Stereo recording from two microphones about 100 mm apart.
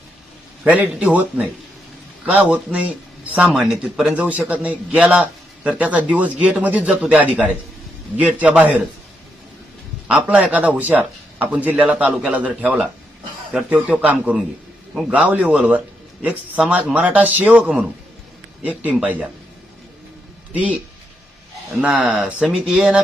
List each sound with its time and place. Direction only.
0.6 s a man's voice: 15° right (ahead or behind)
3.5 s a man's voice: 5° right (ahead or behind)
10.1 s a man's voice: 15° right (ahead or behind)
13.5 s a man's voice: 10° right (ahead or behind)
20.5 s a man's voice: 15° right (ahead or behind)
21.8 s a man's voice: 5° right (ahead or behind)